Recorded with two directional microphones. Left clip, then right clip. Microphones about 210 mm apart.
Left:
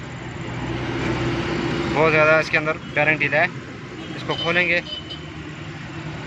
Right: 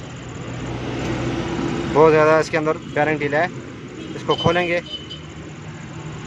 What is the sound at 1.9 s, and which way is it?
Speech, 35° right (ahead or behind).